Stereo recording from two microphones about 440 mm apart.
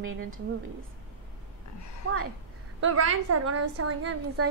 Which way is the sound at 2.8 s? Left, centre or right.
Right.